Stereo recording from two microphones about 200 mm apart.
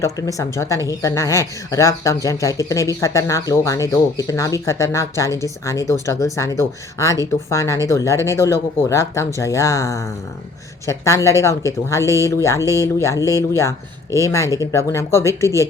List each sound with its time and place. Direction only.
0.0 s speech: 15° left (ahead or behind)
12.6 s speech: 15° right (ahead or behind)
13.0 s speech: 15° left (ahead or behind)
13.2 s speech: 15° right (ahead or behind)
13.6 s speech: 15° left (ahead or behind)